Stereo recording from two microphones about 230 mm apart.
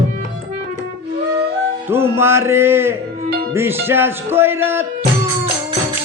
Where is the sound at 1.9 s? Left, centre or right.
Centre.